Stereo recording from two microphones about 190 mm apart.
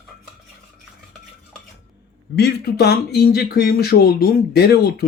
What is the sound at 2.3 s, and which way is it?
Speech, 60° left (ahead or behind).